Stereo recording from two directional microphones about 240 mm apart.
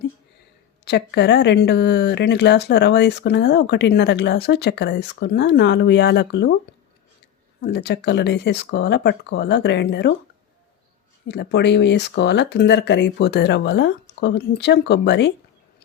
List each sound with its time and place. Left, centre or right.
0.9 s speech: left
7.6 s speech: left
11.3 s speech: left